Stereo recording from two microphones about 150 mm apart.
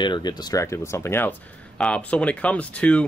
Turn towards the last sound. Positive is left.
turn(degrees=10)  # may be behind; listen again after turning